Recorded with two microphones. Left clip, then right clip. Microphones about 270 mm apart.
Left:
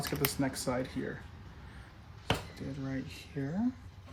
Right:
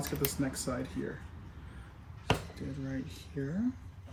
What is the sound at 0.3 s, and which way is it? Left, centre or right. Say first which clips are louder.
Speech: left 2 dB; left.